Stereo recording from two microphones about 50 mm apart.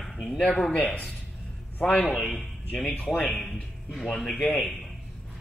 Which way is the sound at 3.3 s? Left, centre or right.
Centre.